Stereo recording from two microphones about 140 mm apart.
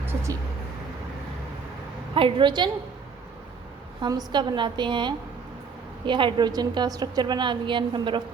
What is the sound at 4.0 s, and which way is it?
A woman's voice, 30° right (ahead or behind).